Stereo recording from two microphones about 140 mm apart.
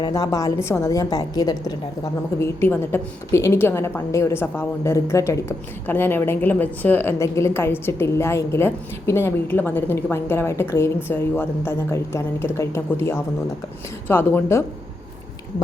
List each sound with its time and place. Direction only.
0.0 s a woman's voice: 25° left (ahead or behind)
2.4 s a woman's voice: 15° left (ahead or behind)